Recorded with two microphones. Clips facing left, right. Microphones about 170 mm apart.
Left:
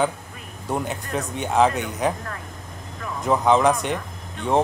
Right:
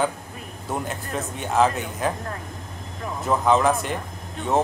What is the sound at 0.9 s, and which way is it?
Speech, centre (ahead or behind).